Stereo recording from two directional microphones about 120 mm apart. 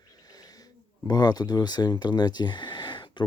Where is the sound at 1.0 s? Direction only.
35° left (ahead or behind).